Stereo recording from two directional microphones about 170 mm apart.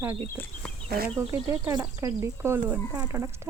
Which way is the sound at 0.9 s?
70° right (ahead or behind).